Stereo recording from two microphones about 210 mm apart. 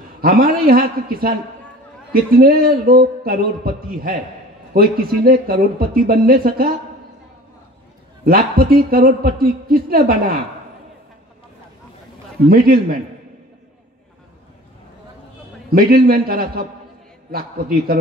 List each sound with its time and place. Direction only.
0.2 s a woman's voice: 45° right (ahead or behind)
2.3 s a woman's voice: 45° right (ahead or behind)
8.3 s a woman's voice: 45° right (ahead or behind)
12.4 s a woman's voice: 45° right (ahead or behind)
15.7 s a woman's voice: 45° right (ahead or behind)